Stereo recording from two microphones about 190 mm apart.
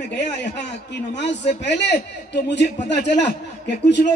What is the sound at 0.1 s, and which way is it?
A man's voice, 65° left (ahead or behind).